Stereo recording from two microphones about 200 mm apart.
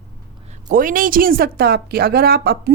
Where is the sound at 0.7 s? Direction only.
45° right (ahead or behind).